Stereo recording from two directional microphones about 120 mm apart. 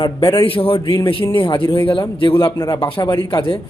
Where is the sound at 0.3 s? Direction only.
50° left (ahead or behind).